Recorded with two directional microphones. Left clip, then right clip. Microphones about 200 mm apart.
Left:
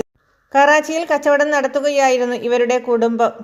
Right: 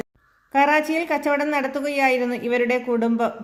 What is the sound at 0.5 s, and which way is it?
A woman's voice, 30° left (ahead or behind).